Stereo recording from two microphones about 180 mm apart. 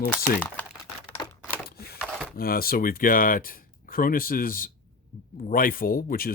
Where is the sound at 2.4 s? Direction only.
55° left (ahead or behind).